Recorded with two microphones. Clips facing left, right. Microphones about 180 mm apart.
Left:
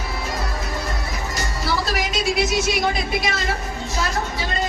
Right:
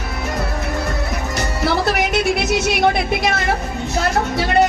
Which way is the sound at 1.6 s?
60° right (ahead or behind).